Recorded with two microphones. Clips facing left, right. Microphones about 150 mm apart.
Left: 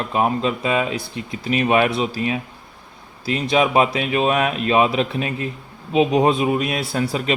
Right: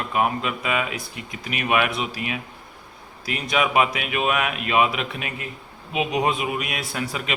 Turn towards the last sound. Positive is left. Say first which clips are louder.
# left 7 dB
turn(degrees=35)  # may be behind; listen again after turning